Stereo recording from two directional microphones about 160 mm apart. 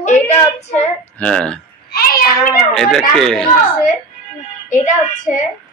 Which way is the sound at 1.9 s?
70° left (ahead or behind).